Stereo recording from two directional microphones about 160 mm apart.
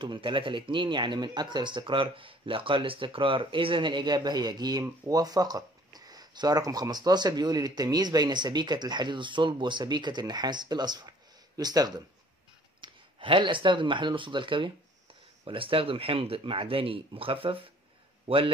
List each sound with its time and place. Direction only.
0.0 s a man's voice: 30° right (ahead or behind)